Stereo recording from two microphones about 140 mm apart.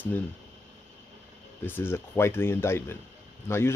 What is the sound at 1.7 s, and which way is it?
Speech, 15° left (ahead or behind).